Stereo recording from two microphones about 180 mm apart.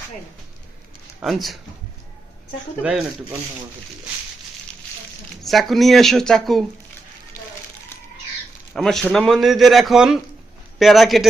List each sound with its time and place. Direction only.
1.2 s a man's voice: centre (ahead or behind)
5.4 s a man's voice: centre (ahead or behind)
8.7 s a man's voice: centre (ahead or behind)